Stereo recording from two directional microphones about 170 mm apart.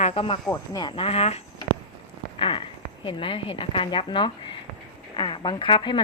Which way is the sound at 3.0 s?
30° left (ahead or behind).